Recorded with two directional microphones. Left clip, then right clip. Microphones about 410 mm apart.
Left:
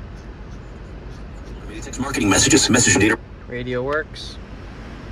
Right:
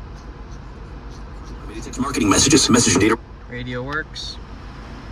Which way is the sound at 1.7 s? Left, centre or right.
Right.